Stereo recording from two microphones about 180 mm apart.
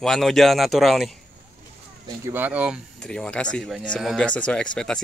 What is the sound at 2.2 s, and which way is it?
Speech, 10° right (ahead or behind).